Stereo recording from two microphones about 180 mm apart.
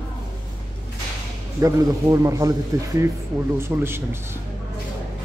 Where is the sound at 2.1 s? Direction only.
20° right (ahead or behind).